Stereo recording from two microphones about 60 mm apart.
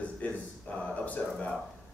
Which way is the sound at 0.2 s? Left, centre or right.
Left.